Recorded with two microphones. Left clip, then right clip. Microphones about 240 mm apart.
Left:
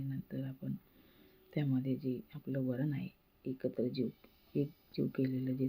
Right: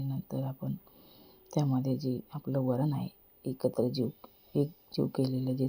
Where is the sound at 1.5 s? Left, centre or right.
Centre.